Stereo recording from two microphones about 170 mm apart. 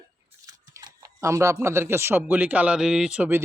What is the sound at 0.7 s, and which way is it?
Speech, 20° right (ahead or behind).